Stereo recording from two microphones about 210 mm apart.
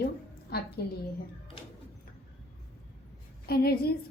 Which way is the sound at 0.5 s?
45° left (ahead or behind).